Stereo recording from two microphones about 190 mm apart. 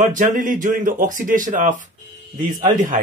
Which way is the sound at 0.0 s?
40° right (ahead or behind).